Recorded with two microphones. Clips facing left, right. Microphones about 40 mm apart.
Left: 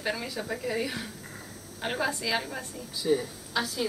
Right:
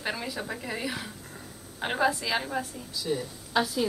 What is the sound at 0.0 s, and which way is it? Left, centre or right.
Speech, centre.